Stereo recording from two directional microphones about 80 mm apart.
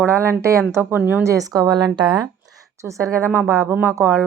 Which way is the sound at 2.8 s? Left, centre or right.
Right.